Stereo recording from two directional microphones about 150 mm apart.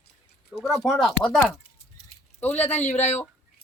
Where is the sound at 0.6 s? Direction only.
Centre (ahead or behind).